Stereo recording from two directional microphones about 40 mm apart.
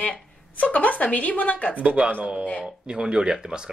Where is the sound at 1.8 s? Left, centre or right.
Right.